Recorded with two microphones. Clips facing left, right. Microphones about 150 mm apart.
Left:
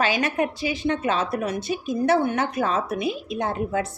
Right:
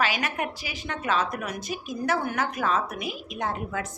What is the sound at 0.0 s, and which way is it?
A woman's voice, 30° left (ahead or behind).